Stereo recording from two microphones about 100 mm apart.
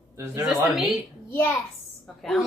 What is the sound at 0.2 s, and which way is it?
Speech, 30° right (ahead or behind).